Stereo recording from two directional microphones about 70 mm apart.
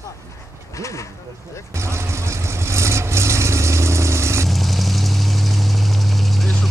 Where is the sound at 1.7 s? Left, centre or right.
Right.